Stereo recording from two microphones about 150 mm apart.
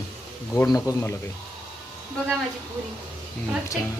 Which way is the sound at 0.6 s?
25° left (ahead or behind).